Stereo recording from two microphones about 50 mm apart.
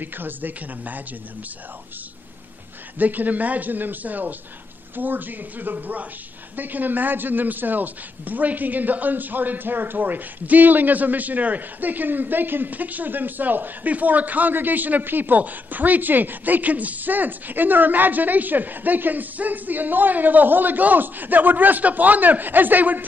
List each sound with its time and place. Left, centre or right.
0.0 s a man's voice: right
3.0 s a man's voice: right